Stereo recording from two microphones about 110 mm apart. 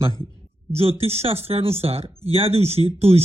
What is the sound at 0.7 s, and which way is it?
Speech, 60° right (ahead or behind).